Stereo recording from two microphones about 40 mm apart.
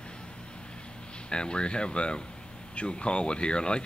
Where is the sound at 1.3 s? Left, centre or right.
Left.